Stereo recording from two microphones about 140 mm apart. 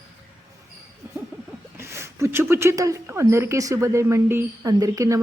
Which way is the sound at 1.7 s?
15° right (ahead or behind).